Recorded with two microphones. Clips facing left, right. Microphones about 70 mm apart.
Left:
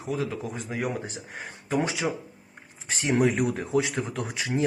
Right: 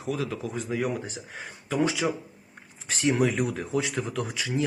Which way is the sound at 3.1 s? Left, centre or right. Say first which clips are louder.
Left 3 dB; left.